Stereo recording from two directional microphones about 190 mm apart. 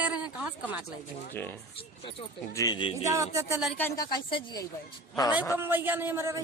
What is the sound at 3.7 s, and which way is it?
Speech, 15° left (ahead or behind).